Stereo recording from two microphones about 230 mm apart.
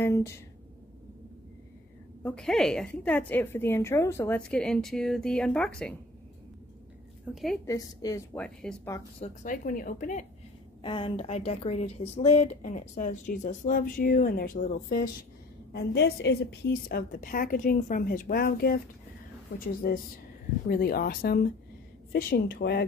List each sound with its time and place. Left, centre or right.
0.0 s speech: centre
2.2 s a woman's voice: centre
7.3 s a woman's voice: centre
7.6 s speech: centre
8.5 s a woman's voice: centre
9.2 s a woman's voice: left
10.8 s a woman's voice: left